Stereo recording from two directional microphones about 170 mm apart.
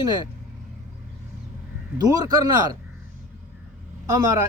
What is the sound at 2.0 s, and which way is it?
Speech, 20° right (ahead or behind).